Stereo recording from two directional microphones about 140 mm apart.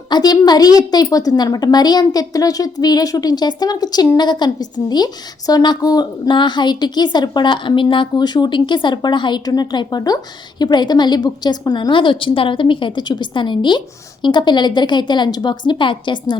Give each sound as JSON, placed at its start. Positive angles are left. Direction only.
{"t": 0.1, "sound": "a woman's voice", "side_deg": 30}